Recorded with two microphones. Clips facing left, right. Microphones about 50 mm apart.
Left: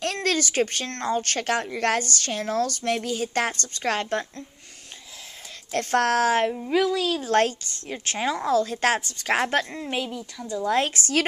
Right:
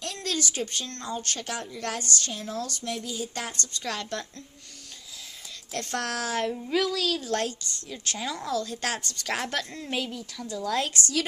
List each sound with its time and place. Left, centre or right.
0.0 s speech: left
3.8 s a woman's voice: left
5.7 s a woman's voice: left
6.5 s speech: centre
7.2 s a woman's voice: left
9.7 s speech: centre
10.5 s a woman's voice: left